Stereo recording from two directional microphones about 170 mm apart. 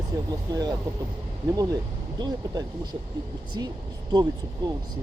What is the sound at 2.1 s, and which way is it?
Speech, 25° right (ahead or behind).